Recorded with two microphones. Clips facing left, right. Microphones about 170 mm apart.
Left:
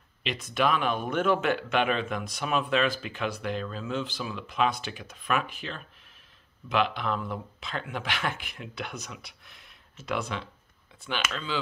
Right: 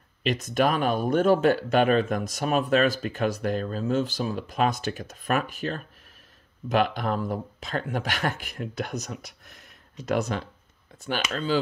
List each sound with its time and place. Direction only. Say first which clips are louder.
0.2 s speech: right 4 dB; 45° right (ahead or behind)